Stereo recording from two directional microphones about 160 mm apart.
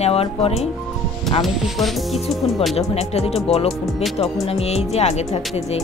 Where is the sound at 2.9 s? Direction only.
40° left (ahead or behind).